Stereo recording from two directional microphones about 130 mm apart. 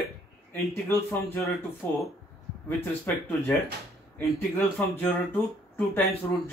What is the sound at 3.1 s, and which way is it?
Speech, 15° left (ahead or behind).